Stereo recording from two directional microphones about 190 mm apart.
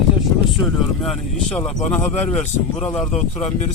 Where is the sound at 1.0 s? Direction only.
Centre (ahead or behind).